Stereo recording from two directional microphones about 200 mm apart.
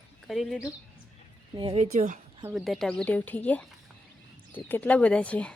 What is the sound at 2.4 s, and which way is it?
A woman's voice, centre (ahead or behind).